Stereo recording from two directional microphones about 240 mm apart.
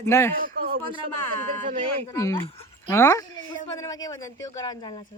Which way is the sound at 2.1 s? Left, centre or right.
Centre.